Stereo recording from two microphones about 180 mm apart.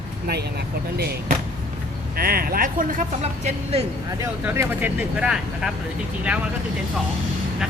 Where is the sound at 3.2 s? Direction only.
35° right (ahead or behind).